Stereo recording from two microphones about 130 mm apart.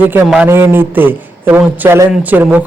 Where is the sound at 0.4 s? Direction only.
20° right (ahead or behind).